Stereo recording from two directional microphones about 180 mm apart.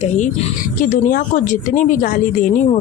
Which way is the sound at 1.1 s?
45° left (ahead or behind).